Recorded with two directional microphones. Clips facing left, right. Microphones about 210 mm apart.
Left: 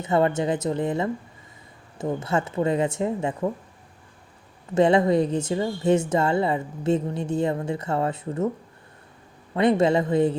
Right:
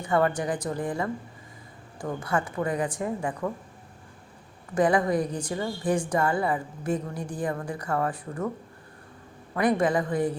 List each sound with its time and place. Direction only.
0.0 s a woman's voice: 20° left (ahead or behind)
4.7 s a woman's voice: 25° left (ahead or behind)
9.6 s a woman's voice: 25° left (ahead or behind)